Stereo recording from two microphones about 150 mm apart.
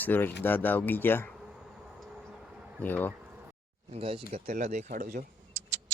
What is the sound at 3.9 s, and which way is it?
Speech, 40° right (ahead or behind).